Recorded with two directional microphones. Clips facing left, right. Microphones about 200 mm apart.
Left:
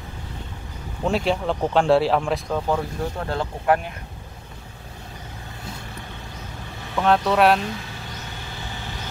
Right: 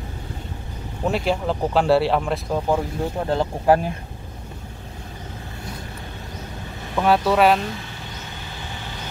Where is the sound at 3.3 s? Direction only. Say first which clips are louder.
Right 4 dB; 25° right (ahead or behind).